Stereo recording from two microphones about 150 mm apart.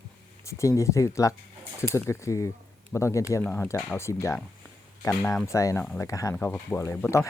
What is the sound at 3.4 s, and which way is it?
Speech, 5° left (ahead or behind).